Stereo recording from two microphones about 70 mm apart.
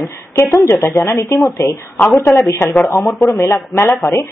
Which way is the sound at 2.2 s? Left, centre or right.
Left.